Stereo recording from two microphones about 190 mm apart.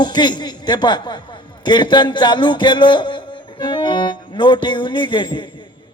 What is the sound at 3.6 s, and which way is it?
Music, 25° left (ahead or behind).